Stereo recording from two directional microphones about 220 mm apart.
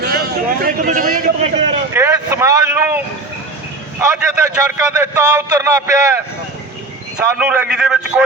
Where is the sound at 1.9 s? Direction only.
10° right (ahead or behind).